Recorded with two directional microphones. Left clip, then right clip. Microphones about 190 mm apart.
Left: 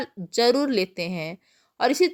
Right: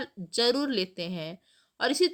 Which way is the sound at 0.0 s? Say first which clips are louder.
Left 5 dB; 30° left (ahead or behind).